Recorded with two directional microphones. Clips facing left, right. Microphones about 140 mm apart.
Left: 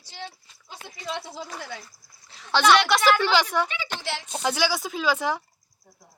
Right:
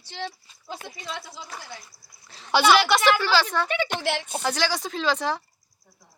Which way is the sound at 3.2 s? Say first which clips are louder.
Left 1 dB; 15° left (ahead or behind).